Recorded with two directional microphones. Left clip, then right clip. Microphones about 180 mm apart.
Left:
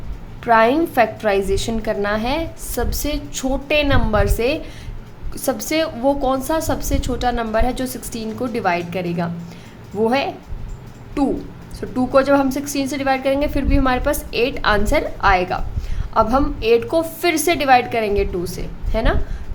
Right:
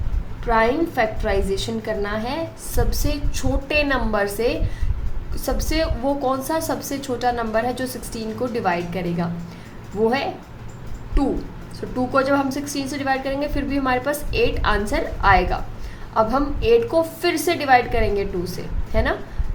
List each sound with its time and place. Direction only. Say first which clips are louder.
0.4 s a woman's voice: left 5 dB; 35° left (ahead or behind)
11.8 s a woman's voice: left 4 dB; 30° left (ahead or behind)